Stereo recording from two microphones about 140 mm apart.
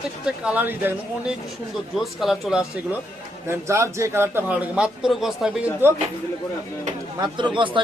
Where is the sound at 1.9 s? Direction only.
Centre (ahead or behind).